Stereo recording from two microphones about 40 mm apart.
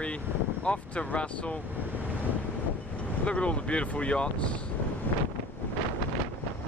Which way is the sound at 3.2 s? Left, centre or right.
Left.